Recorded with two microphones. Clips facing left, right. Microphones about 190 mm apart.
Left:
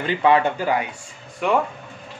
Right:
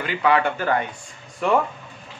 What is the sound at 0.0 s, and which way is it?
Speech, 25° left (ahead or behind).